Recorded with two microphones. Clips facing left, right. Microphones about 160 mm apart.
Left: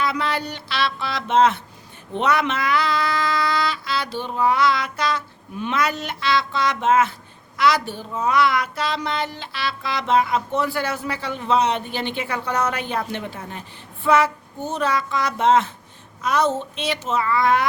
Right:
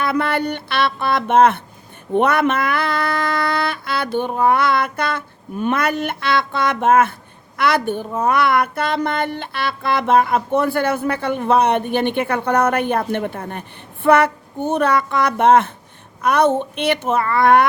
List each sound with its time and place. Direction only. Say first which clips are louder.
0.0 s speech: right 5 dB; 55° right (ahead or behind)
2.1 s music: right 5 dB; 55° right (ahead or behind)
7.5 s speech: right 2 dB; 55° right (ahead or behind)